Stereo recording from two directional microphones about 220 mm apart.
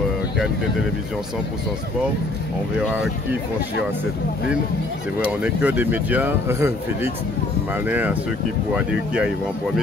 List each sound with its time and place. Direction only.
5.2 s speech: 5° right (ahead or behind)